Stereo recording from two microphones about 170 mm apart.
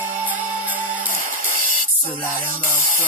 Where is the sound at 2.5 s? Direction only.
50° right (ahead or behind).